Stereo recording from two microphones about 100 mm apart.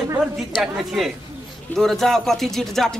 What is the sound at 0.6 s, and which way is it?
Speech, centre (ahead or behind).